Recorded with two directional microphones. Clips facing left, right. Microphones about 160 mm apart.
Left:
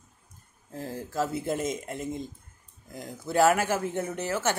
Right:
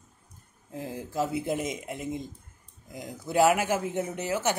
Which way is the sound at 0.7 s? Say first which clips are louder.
Even; 15° right (ahead or behind).